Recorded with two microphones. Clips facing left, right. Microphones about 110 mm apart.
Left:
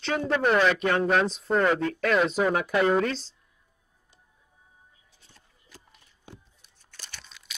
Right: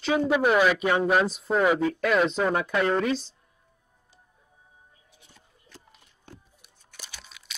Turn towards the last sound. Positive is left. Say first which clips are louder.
# right 1 dB
turn(degrees=-5)  # may be behind; listen again after turning